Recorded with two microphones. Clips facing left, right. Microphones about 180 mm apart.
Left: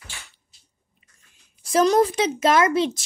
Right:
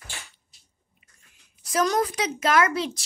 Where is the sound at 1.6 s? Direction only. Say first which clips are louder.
Left 6 dB; 25° left (ahead or behind).